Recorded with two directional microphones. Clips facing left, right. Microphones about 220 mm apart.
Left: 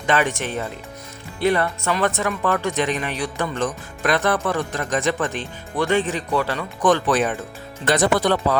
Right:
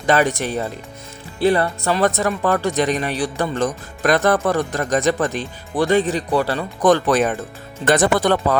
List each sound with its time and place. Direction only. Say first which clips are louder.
0.0 s speech: right 4 dB; 40° right (ahead or behind)